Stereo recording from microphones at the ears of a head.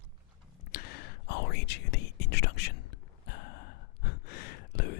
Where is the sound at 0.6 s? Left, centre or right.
Left.